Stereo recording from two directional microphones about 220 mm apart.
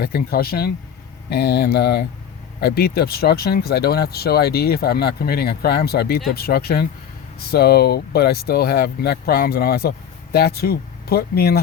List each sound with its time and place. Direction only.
0.0 s speech: 45° left (ahead or behind)